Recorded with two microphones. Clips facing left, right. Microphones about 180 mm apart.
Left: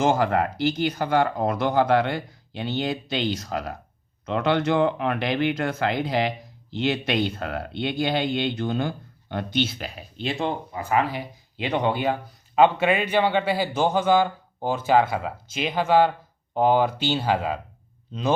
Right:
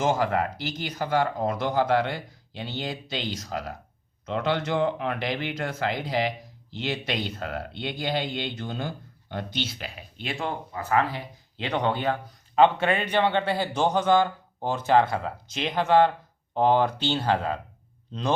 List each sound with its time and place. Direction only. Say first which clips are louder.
0.0 s speech: left 3 dB; 60° left (ahead or behind)
10.2 s speech: left 4 dB; 25° left (ahead or behind); by 18.3 s 5° left (ahead or behind)